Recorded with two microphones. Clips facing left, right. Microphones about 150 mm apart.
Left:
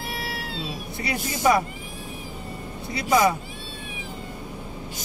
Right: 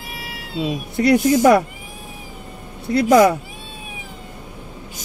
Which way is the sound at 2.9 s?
70° right (ahead or behind).